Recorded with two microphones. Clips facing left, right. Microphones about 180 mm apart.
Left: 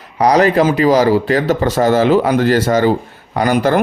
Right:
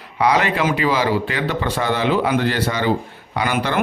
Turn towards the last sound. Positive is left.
turn(degrees=40)  # may be behind; listen again after turning